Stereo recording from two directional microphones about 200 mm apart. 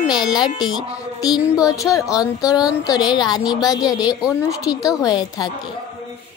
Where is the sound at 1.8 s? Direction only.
15° left (ahead or behind).